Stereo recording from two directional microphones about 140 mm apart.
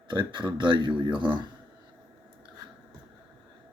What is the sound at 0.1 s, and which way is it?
Speech, 35° right (ahead or behind).